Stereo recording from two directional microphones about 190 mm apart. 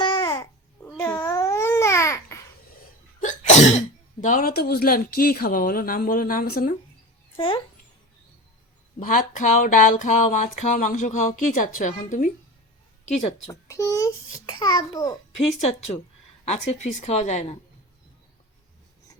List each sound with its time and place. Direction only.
0.0 s babbling: 20° left (ahead or behind)
3.2 s speech: 40° left (ahead or behind)
7.3 s a child's voice: 25° left (ahead or behind)
9.0 s speech: 45° left (ahead or behind)
13.5 s a child's voice: 15° left (ahead or behind); by 17.6 s 40° left (ahead or behind)